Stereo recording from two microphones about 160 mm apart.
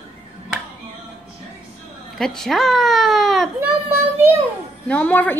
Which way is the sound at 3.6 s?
10° right (ahead or behind).